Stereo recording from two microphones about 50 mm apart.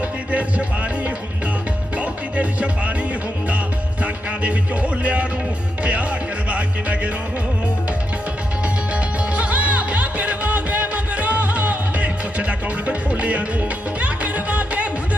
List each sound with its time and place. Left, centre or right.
0.3 s music: right
2.0 s music: right
4.0 s speech: right
5.8 s music: right
8.6 s music: right